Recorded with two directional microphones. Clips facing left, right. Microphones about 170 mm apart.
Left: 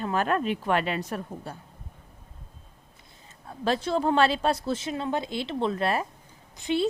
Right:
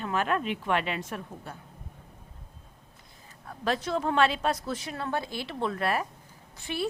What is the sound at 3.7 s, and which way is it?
A woman's voice, 30° left (ahead or behind).